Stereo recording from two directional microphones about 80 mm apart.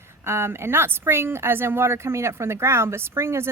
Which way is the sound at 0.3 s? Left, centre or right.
Right.